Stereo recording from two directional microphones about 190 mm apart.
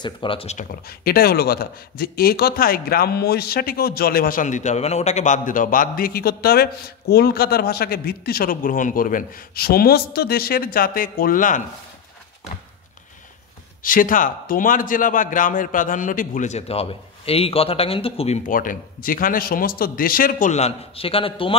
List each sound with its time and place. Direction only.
0.0 s speech: 25° left (ahead or behind); by 11.6 s 45° left (ahead or behind)
13.8 s speech: 45° left (ahead or behind)
18.5 s speech: 45° left (ahead or behind); by 21.5 s 30° left (ahead or behind)